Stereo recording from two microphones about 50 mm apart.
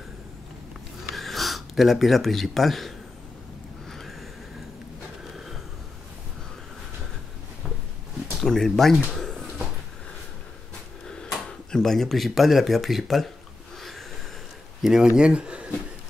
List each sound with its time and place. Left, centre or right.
1.1 s speech: centre
8.5 s speech: centre
9.2 s a sound: centre
11.4 s speech: centre
14.8 s speech: centre